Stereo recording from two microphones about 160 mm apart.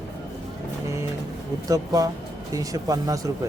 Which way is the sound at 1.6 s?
20° right (ahead or behind).